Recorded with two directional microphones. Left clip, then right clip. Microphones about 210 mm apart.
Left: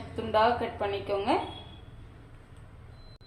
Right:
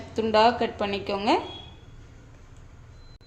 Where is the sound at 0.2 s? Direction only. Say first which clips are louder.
Right 5 dB; 55° right (ahead or behind).